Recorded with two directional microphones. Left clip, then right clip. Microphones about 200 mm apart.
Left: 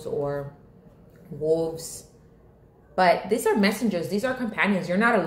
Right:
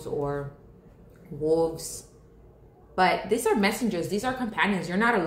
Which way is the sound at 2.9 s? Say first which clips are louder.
Left 3 dB; 10° right (ahead or behind).